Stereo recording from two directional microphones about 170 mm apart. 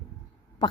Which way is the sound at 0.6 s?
25° left (ahead or behind).